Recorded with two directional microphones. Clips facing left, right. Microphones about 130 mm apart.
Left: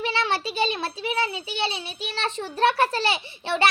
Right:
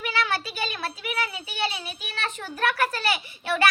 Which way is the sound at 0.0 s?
25° left (ahead or behind).